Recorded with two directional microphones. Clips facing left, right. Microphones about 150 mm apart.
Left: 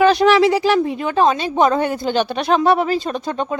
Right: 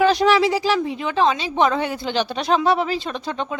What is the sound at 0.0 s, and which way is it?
Speech, 65° left (ahead or behind).